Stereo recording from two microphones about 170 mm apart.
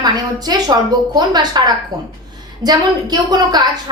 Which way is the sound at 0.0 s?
25° right (ahead or behind).